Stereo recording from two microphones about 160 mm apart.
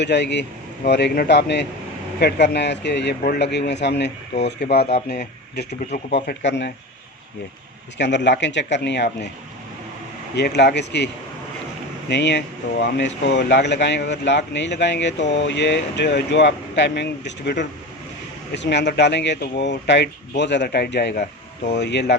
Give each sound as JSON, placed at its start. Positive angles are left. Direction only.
{"t": 0.0, "sound": "speech", "side_deg": 90}
{"t": 5.0, "sound": "speech", "side_deg": 75}
{"t": 6.1, "sound": "speech", "side_deg": 90}
{"t": 7.9, "sound": "speech", "side_deg": 90}
{"t": 10.3, "sound": "speech", "side_deg": 90}